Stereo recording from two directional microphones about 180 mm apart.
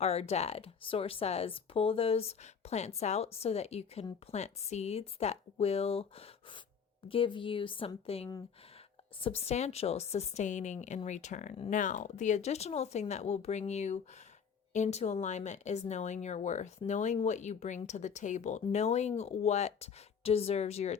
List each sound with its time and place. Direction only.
0.0 s a woman's voice: 35° left (ahead or behind)